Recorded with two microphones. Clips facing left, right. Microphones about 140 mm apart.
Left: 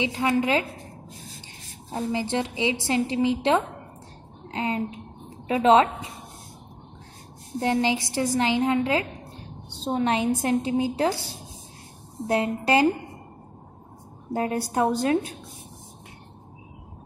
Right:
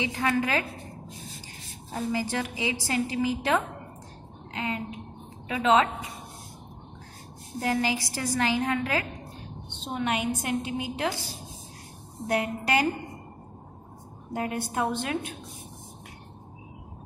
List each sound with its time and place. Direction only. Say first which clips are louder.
0.0 s a woman's voice: left 3 dB; 20° left (ahead or behind)
2.0 s a woman's voice: left 3 dB; 25° left (ahead or behind)
7.6 s a woman's voice: left 4 dB; 25° left (ahead or behind)
9.7 s a woman's voice: left 5 dB; 35° left (ahead or behind)
12.3 s a woman's voice: left 4 dB; 25° left (ahead or behind)
14.3 s a woman's voice: left 5 dB; 35° left (ahead or behind)